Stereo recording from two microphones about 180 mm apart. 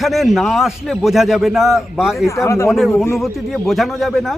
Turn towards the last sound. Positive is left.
turn(degrees=0)  # may be behind; listen again after turning